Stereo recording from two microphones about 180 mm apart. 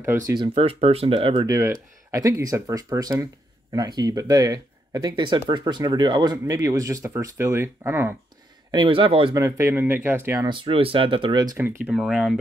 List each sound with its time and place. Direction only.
0.3 s speech: 25° right (ahead or behind)
8.7 s speech: 30° right (ahead or behind)
11.5 s speech: 10° right (ahead or behind)